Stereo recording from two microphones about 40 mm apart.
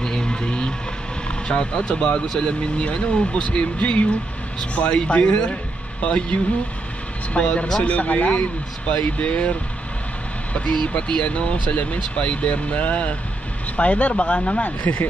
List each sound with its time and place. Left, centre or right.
0.0 s a sound: centre
1.5 s speech: left
11.0 s speech: left
14.8 s speech: left